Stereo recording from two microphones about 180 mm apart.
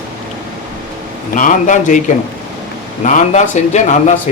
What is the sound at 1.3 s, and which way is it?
Speech, 45° left (ahead or behind).